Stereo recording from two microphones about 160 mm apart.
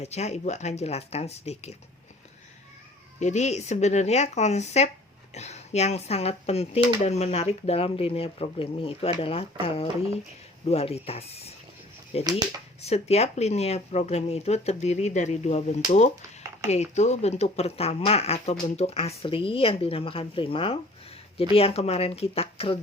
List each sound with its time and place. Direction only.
0.0 s speech: 45° left (ahead or behind)
3.2 s speech: 45° left (ahead or behind)